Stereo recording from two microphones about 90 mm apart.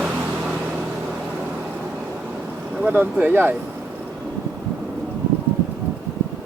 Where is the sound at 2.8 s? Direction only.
15° right (ahead or behind).